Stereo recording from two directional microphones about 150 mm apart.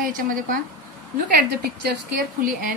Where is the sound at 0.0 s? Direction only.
65° right (ahead or behind).